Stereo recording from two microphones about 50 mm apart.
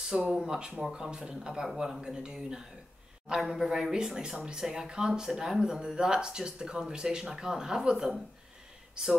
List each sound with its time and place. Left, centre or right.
0.1 s speech: centre